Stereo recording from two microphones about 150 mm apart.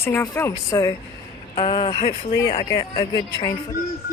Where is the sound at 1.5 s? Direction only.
35° left (ahead or behind).